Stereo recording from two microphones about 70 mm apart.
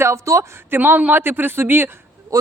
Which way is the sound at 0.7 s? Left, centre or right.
Right.